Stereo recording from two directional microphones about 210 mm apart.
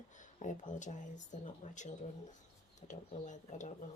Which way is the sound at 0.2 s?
35° left (ahead or behind).